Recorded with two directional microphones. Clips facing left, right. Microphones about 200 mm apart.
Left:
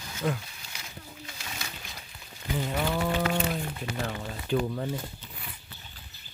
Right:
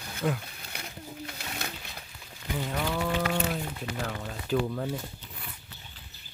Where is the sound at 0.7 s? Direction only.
60° right (ahead or behind).